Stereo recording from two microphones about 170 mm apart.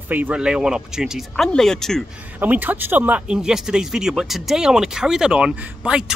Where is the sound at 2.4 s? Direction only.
10° right (ahead or behind).